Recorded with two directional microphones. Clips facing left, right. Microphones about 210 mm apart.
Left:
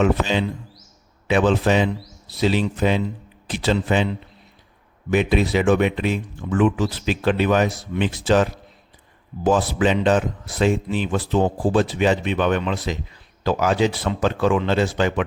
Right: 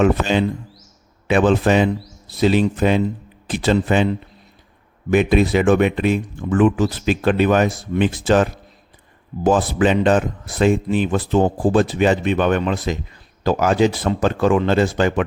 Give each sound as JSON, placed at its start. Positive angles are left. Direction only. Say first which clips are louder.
{"t": 0.0, "sound": "speech", "louder": "right 3 dB", "side_deg": -50}
{"t": 5.1, "sound": "speech", "louder": "right 3 dB", "side_deg": -50}